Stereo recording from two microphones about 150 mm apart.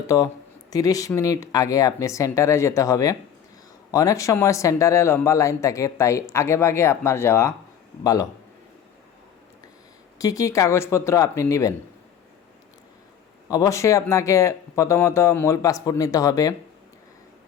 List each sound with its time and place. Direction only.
0.7 s speech: 25° left (ahead or behind)
10.2 s speech: 25° left (ahead or behind)
13.5 s speech: 20° left (ahead or behind)